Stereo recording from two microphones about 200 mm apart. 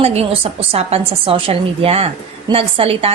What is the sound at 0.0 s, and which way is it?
A woman's voice, 30° right (ahead or behind).